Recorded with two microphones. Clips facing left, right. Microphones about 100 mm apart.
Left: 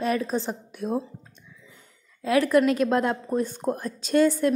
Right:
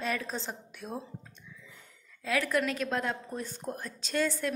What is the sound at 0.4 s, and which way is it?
Speech, 50° left (ahead or behind).